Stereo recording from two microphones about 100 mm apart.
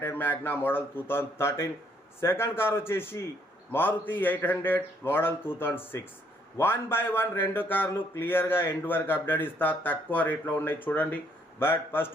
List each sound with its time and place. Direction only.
0.0 s speech: 20° left (ahead or behind)